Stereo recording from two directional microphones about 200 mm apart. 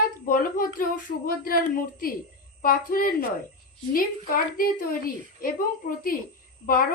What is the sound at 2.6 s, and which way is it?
A woman's voice, 45° left (ahead or behind).